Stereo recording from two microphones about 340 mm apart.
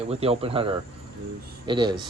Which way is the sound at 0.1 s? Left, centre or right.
Centre.